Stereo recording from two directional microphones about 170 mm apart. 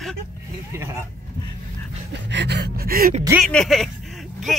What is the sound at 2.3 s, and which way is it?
Gasp, 85° right.